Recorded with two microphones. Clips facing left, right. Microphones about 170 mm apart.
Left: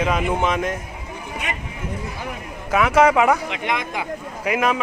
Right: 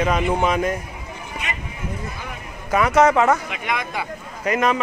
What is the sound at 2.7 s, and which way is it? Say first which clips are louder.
Speech: even; 5° left (ahead or behind).